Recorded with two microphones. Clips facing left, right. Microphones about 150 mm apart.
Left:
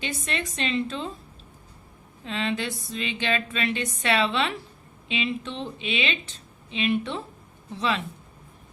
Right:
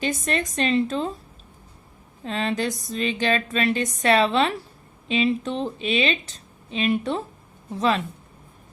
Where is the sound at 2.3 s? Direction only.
40° right (ahead or behind).